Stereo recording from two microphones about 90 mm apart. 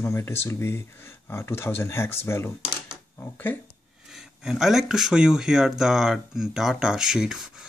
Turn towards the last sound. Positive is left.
turn(degrees=-5)  # may be behind; listen again after turning